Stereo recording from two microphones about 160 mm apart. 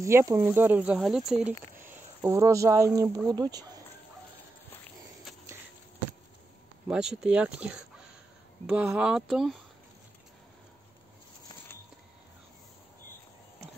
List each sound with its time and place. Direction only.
0.0 s speech: 20° right (ahead or behind); by 1.5 s 5° right (ahead or behind)
1.8 s speech: 15° right (ahead or behind)
6.9 s speech: 5° right (ahead or behind)